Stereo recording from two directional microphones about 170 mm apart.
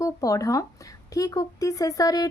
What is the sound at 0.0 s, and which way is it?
Speech, 20° left (ahead or behind).